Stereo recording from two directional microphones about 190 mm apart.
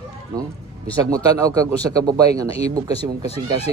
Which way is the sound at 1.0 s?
20° right (ahead or behind).